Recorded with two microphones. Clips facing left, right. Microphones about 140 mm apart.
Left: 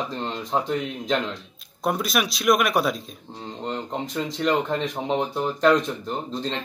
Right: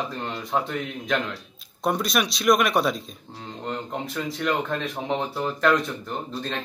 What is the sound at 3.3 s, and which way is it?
Speech, 20° left (ahead or behind).